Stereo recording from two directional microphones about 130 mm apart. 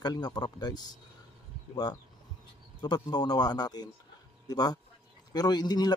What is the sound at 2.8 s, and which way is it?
A man's voice, 30° left (ahead or behind).